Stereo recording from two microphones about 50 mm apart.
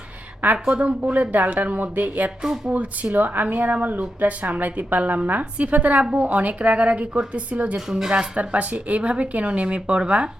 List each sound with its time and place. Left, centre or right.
0.7 s a woman's voice: right
2.4 s speech: centre
2.7 s a woman's voice: right
7.9 s speech: centre
8.1 s a woman's voice: right